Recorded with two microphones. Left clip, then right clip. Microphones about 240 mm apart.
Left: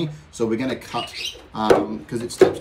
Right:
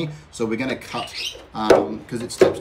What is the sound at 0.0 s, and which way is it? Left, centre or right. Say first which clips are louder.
Speech: left 1 dB; centre.